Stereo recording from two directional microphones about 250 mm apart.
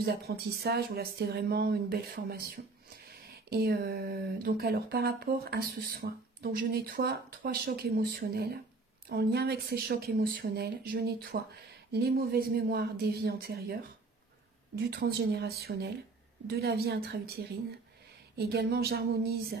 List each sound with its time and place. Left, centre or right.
0.0 s speech: right
14.9 s speech: right